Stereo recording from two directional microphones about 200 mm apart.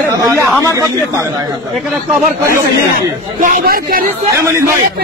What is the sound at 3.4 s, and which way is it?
Speech, 45° right (ahead or behind).